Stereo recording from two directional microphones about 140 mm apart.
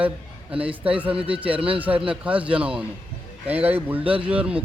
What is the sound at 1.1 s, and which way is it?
Speech, 40° right (ahead or behind).